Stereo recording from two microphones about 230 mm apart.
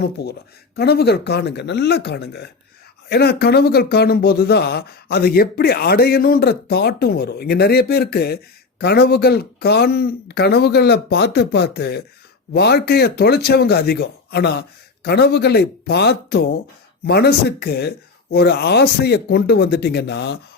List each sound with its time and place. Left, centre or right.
0.0 s speech: left